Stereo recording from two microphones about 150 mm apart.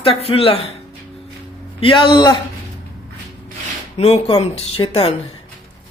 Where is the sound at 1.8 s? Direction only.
35° left (ahead or behind).